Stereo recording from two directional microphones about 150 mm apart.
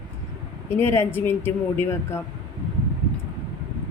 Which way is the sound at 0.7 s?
15° left (ahead or behind).